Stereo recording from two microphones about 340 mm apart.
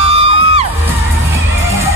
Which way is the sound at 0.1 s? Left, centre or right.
Left.